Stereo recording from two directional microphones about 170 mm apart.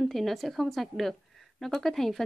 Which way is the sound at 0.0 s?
Centre (ahead or behind).